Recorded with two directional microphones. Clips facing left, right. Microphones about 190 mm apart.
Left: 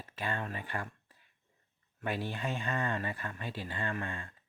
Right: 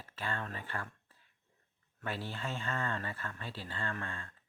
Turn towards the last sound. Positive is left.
turn(degrees=15)  # may be behind; listen again after turning